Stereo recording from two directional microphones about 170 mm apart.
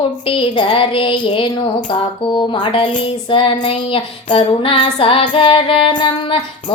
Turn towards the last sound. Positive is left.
turn(degrees=30)  # may be behind; listen again after turning